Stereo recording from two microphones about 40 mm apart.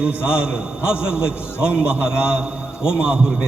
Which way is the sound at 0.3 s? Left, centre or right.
Right.